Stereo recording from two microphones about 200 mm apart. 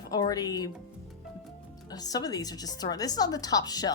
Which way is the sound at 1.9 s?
20° left (ahead or behind).